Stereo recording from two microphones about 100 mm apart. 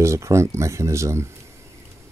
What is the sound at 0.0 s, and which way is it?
Speech, 30° right (ahead or behind).